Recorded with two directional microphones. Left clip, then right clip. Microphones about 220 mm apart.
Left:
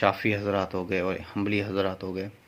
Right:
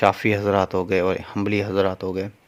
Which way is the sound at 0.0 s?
40° right (ahead or behind).